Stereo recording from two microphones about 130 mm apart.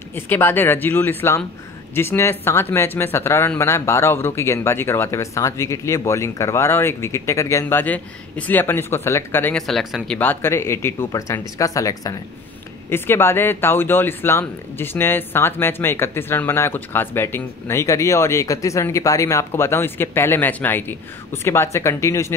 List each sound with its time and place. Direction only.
0.1 s speech: 15° left (ahead or behind)
7.8 s speech: 10° left (ahead or behind)
9.6 s speech: centre (ahead or behind)
10.1 s speech: 15° left (ahead or behind)